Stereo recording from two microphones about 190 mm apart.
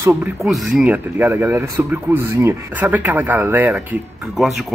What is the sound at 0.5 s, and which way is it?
A man's voice, 5° right (ahead or behind).